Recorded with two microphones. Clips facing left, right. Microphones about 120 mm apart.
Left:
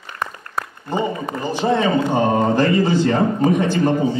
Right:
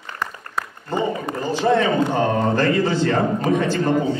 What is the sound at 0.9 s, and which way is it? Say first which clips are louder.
A man's voice: left 1 dB; 15° left (ahead or behind).